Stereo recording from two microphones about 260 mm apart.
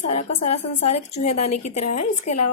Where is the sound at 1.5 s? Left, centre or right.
Left.